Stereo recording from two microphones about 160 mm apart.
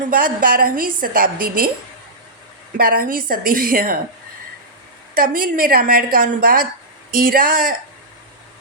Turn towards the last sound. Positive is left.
turn(degrees=-60)  # may be behind; listen again after turning